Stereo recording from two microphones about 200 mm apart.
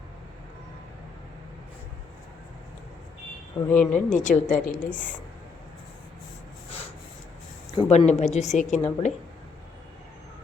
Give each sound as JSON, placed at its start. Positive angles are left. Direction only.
{"t": 3.7, "sound": "speech", "side_deg": 10}
{"t": 4.1, "sound": "speech", "side_deg": 40}
{"t": 7.8, "sound": "speech", "side_deg": 35}